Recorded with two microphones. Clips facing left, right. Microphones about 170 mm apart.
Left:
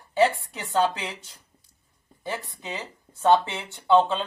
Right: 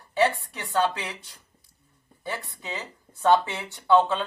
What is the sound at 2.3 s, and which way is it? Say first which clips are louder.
Speech: left 1 dB; 20° left (ahead or behind).